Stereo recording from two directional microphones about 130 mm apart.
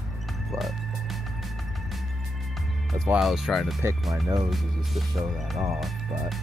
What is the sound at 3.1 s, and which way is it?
Speech, centre (ahead or behind).